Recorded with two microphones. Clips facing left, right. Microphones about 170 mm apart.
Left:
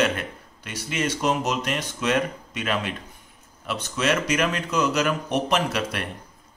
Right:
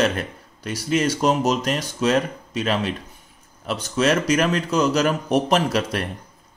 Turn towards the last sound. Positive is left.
turn(degrees=-35)  # may be behind; listen again after turning